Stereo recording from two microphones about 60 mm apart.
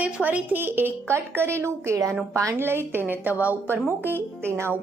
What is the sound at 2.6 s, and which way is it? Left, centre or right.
A woman's voice, right.